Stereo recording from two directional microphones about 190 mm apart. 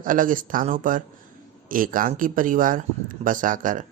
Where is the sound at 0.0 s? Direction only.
45° right (ahead or behind).